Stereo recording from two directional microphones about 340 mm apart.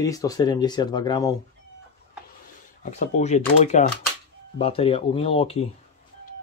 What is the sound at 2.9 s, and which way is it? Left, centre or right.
Speech, left.